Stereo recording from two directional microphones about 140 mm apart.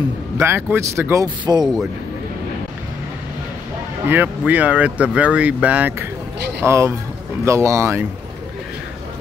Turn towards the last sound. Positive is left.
turn(degrees=-20)  # may be behind; listen again after turning